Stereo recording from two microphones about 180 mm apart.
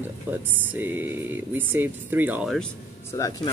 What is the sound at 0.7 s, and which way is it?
Speech, 10° right (ahead or behind).